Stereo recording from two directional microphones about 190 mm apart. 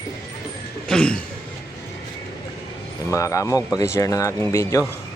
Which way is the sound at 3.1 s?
15° left (ahead or behind).